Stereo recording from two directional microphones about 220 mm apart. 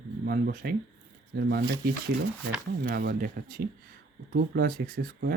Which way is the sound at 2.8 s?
45° right (ahead or behind).